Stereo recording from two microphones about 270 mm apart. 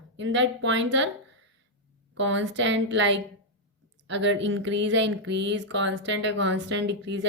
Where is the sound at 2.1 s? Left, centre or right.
Right.